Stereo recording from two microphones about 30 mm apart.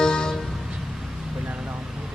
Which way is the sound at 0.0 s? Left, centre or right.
Left.